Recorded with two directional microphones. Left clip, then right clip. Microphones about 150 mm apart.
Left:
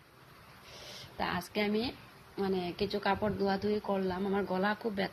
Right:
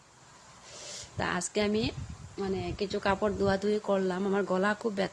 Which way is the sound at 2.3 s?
20° right (ahead or behind).